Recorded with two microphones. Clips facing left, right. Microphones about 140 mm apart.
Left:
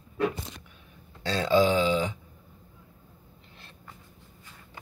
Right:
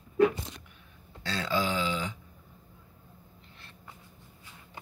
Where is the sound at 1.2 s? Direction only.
25° left (ahead or behind).